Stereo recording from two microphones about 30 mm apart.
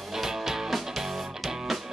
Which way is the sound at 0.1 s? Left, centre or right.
Centre.